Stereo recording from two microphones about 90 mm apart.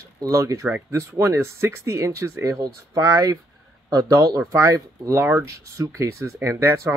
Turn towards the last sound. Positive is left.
turn(degrees=-35)  # may be behind; listen again after turning